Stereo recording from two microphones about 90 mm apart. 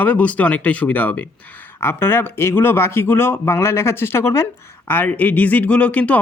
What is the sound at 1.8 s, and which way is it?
Speech, 25° left (ahead or behind).